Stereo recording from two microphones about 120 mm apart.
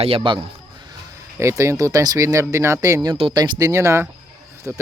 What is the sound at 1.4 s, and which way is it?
Speech, 25° right (ahead or behind).